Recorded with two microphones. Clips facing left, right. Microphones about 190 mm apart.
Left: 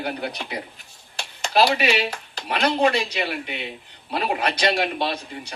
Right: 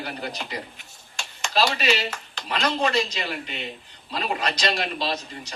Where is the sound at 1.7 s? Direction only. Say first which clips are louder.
Left 3 dB; 60° left (ahead or behind).